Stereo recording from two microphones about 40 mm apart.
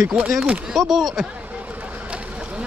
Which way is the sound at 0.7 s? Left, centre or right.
Centre.